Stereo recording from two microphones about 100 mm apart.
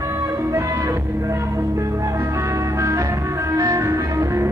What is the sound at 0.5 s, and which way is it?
Music, 30° right (ahead or behind).